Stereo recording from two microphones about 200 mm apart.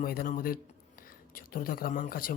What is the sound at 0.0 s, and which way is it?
A man's voice, 45° left (ahead or behind).